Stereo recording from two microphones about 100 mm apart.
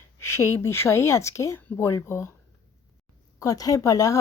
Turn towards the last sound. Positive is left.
turn(degrees=35)  # may be behind; listen again after turning